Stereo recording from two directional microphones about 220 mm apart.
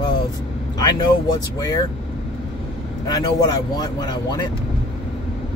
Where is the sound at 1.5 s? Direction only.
15° left (ahead or behind).